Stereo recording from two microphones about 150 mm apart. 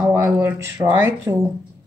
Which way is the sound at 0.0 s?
10° right (ahead or behind).